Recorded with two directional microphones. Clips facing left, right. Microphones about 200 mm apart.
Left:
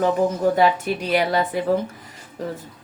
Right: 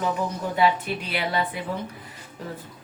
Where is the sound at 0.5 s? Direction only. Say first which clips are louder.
Left 4 dB; 40° left (ahead or behind).